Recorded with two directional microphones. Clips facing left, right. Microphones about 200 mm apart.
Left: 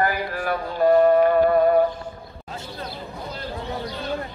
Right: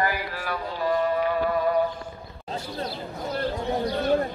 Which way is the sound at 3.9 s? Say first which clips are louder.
Right 6 dB; 50° right (ahead or behind).